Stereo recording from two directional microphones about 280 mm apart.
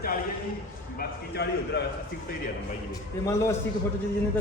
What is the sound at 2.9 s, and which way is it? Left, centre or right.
Speech, centre.